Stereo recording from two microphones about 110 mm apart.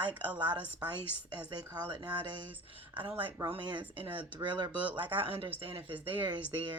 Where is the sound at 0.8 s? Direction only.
35° right (ahead or behind); by 5.8 s 55° right (ahead or behind).